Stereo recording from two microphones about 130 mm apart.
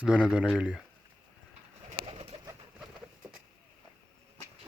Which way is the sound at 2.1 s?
55° right (ahead or behind).